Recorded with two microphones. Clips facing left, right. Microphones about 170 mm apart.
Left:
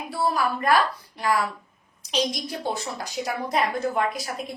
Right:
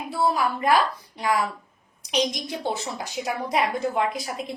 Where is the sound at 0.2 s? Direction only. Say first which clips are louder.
Right 1 dB; 15° right (ahead or behind).